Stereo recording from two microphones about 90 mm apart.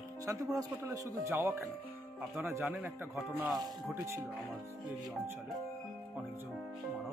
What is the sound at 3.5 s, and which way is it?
Speech, 35° right (ahead or behind).